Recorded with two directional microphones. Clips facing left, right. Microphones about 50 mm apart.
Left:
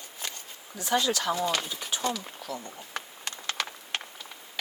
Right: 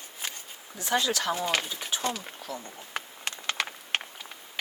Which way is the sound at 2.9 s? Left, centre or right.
Right.